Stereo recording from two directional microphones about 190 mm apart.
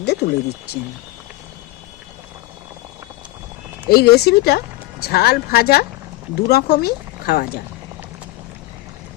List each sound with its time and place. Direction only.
0.0 s speech: 60° left (ahead or behind)
3.8 s speech: 55° left (ahead or behind)